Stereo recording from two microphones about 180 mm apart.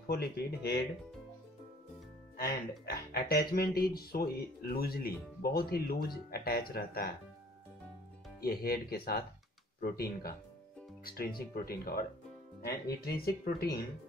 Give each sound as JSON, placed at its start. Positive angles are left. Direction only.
{"t": 0.0, "sound": "speech", "side_deg": 60}
{"t": 2.3, "sound": "speech", "side_deg": 55}
{"t": 8.4, "sound": "speech", "side_deg": 55}